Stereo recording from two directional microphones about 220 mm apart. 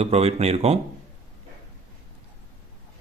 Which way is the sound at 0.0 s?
30° right (ahead or behind).